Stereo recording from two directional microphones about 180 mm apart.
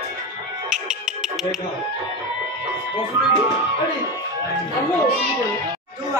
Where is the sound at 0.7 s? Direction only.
5° right (ahead or behind).